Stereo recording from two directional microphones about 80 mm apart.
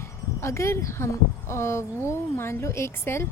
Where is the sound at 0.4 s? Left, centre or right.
Left.